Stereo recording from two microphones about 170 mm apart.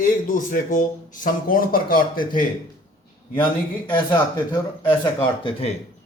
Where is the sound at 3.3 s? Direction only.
30° left (ahead or behind).